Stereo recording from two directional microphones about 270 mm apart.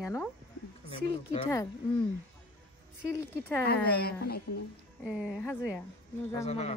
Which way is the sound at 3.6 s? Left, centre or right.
Left.